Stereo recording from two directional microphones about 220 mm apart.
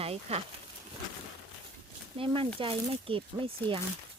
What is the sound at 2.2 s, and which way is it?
Speech, 25° right (ahead or behind).